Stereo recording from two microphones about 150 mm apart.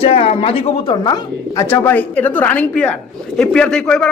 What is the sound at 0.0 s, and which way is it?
Speech, 40° left (ahead or behind).